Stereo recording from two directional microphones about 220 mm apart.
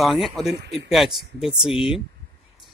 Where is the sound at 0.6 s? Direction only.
50° right (ahead or behind).